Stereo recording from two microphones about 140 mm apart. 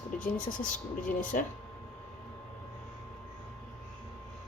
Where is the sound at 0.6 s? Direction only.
80° left.